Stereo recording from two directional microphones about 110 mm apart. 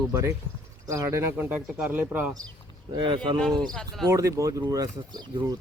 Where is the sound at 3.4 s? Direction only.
5° left (ahead or behind).